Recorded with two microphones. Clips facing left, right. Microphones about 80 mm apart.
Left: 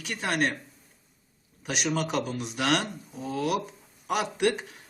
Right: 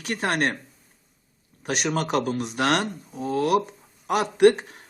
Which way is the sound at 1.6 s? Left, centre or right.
Right.